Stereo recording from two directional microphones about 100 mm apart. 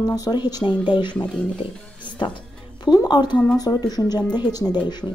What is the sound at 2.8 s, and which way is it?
Speech, 45° left (ahead or behind).